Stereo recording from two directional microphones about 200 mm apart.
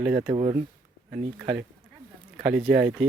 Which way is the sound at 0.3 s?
30° right (ahead or behind).